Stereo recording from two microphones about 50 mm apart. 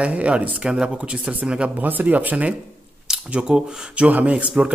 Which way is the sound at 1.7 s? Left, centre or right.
Right.